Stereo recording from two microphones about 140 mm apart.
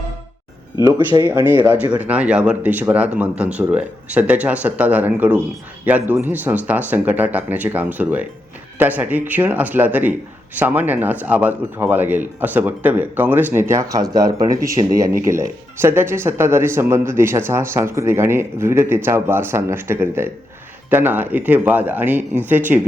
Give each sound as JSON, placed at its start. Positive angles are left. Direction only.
{"t": 1.2, "sound": "speech", "side_deg": -15}